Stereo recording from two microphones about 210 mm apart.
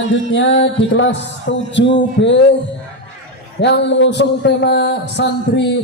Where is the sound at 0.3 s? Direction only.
60° left (ahead or behind).